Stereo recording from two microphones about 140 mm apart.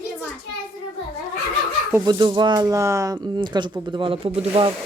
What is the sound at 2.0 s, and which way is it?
Speech, 30° right (ahead or behind).